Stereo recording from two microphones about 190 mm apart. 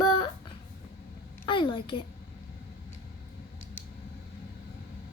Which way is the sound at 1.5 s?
25° left (ahead or behind).